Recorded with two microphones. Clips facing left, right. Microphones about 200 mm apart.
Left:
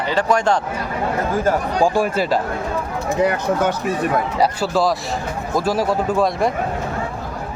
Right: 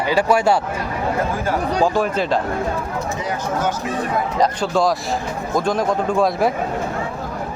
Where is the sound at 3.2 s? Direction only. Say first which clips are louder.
Left 7 dB; 60° left (ahead or behind).